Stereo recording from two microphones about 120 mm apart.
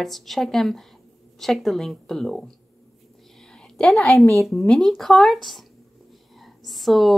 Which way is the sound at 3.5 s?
5° left (ahead or behind).